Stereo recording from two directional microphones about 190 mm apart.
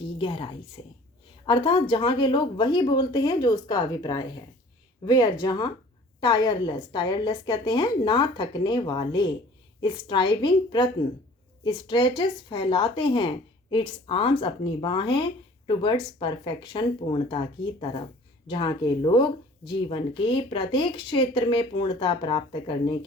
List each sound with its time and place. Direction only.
0.2 s a woman's voice: 25° left (ahead or behind)